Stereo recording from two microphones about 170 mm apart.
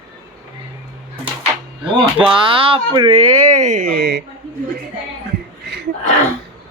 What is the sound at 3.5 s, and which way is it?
Speech, 45° right (ahead or behind).